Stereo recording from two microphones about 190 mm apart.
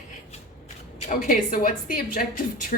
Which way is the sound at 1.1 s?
45° left (ahead or behind).